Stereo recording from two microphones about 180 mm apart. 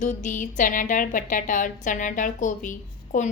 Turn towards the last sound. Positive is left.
turn(degrees=45)  # may be behind; listen again after turning